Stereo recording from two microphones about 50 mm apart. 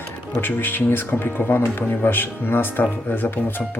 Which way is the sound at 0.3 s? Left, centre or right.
Left.